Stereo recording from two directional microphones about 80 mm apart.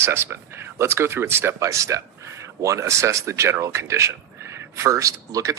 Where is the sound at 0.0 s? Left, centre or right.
Right.